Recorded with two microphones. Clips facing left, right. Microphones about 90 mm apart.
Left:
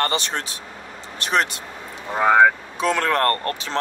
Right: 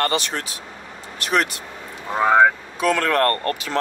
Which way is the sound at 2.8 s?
20° left (ahead or behind).